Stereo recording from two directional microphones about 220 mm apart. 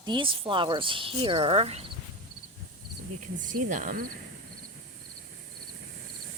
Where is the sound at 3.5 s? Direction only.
35° right (ahead or behind).